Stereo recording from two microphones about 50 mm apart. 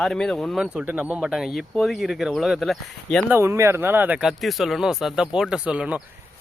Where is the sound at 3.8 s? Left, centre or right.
Right.